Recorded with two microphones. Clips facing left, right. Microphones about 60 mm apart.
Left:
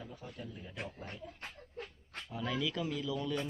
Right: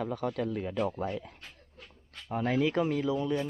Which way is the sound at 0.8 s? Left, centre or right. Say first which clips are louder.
Right 12 dB; right.